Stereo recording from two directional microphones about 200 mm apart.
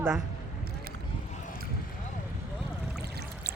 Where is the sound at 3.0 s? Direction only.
55° right (ahead or behind).